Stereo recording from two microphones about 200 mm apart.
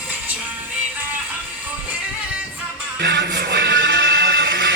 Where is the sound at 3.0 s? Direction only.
60° right (ahead or behind).